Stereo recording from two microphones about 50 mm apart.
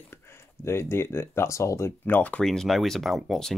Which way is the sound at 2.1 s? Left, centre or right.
Left.